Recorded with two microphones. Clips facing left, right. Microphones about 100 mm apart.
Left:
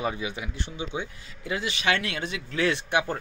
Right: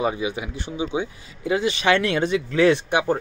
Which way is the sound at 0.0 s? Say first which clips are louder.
Right 6 dB; 15° right (ahead or behind).